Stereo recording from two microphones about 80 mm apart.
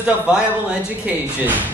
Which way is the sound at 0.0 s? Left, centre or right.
Centre.